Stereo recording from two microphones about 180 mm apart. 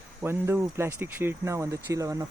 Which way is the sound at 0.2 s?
15° right (ahead or behind).